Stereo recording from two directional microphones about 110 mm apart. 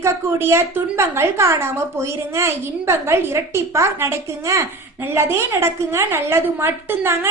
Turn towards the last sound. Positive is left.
turn(degrees=-20)  # may be behind; listen again after turning